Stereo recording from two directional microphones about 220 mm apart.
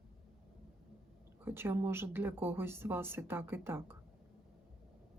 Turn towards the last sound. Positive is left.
turn(degrees=-10)  # may be behind; listen again after turning